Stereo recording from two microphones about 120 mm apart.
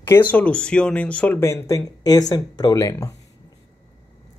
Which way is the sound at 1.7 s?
30° left (ahead or behind).